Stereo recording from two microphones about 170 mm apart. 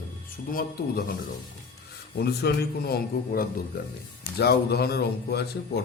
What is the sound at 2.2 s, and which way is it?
Speech, 70° left (ahead or behind).